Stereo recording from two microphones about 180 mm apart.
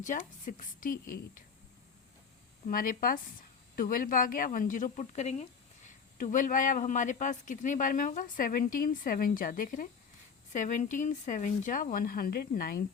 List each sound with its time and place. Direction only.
0.0 s speech: 45° left (ahead or behind)
2.6 s speech: 50° left (ahead or behind)